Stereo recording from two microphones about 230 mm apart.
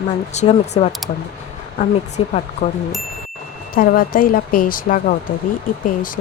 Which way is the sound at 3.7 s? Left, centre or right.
Left.